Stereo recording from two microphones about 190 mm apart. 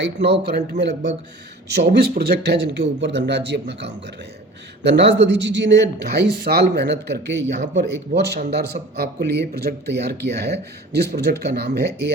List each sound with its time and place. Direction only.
0.0 s speech: 60° right (ahead or behind)